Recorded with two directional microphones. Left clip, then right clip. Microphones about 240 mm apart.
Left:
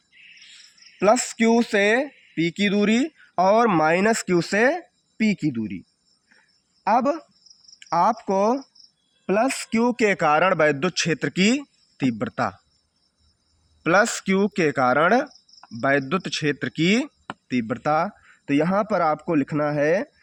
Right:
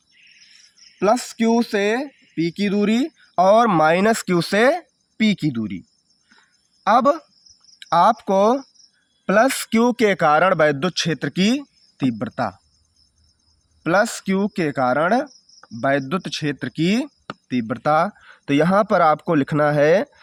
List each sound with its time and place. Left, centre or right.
0.9 s speech: centre; by 5.7 s right
6.8 s speech: right; by 12.5 s centre
13.8 s speech: centre; by 20.1 s right